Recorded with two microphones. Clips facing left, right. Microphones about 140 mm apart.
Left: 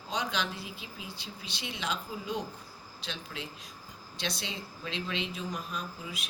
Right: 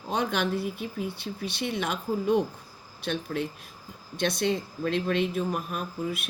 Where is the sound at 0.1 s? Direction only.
55° right (ahead or behind).